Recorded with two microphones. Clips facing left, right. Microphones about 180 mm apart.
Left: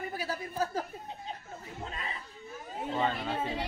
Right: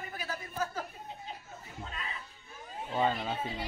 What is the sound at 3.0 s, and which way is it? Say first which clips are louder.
Speech: right 2 dB; 10° right (ahead or behind).